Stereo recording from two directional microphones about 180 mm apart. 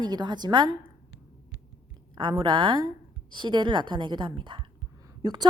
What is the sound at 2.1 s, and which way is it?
A woman's voice, 25° right (ahead or behind).